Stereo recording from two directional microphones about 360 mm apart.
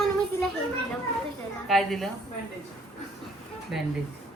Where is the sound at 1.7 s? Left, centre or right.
Centre.